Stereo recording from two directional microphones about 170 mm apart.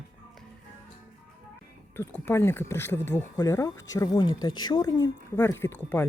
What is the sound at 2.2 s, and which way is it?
Speech, 15° left (ahead or behind).